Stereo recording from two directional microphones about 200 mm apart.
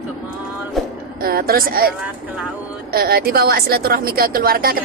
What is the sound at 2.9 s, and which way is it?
Speech, 50° right (ahead or behind).